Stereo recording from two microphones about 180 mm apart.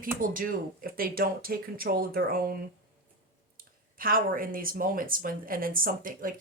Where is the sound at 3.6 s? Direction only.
50° right (ahead or behind).